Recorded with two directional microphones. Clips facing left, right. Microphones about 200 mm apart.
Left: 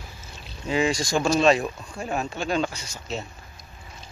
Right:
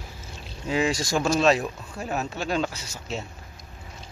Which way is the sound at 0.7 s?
5° right (ahead or behind).